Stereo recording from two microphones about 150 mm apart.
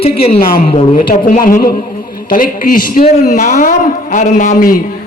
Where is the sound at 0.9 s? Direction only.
65° left (ahead or behind).